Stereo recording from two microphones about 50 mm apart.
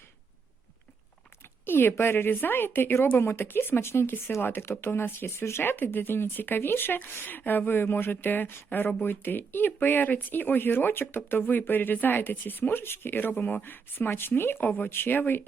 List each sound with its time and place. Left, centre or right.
1.6 s speech: left
14.8 s speech: left